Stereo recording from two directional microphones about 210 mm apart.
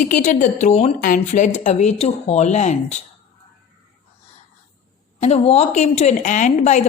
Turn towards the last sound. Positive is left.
turn(degrees=35)  # may be behind; listen again after turning